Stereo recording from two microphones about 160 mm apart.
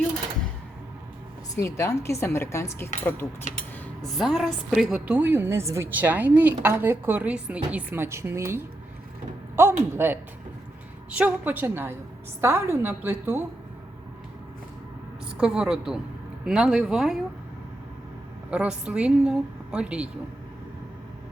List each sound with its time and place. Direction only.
1.5 s a woman's voice: 15° left (ahead or behind)
4.1 s a woman's voice: centre (ahead or behind)
15.4 s speech: 5° right (ahead or behind)
18.5 s a woman's voice: 5° right (ahead or behind)